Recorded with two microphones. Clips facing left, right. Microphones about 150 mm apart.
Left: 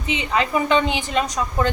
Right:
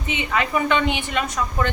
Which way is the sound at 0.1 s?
30° left (ahead or behind).